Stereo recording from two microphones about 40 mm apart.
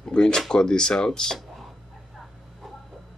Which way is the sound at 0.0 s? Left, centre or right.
Centre.